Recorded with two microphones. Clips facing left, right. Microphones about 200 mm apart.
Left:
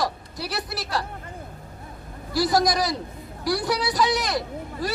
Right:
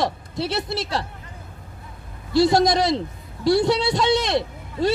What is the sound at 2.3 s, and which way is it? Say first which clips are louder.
A man's voice: right 5 dB; 25° right (ahead or behind).